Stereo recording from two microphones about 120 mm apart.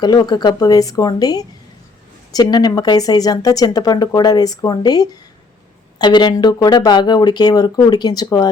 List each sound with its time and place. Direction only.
0.0 s speech: 35° left (ahead or behind)